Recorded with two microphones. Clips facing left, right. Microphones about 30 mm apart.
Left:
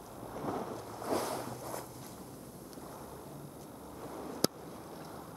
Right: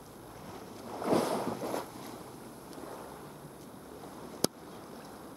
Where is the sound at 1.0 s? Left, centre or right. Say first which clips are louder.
Right 6 dB; right.